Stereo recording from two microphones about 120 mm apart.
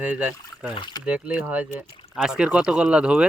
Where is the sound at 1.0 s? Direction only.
10° right (ahead or behind).